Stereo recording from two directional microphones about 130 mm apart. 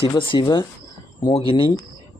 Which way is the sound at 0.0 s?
40° left (ahead or behind).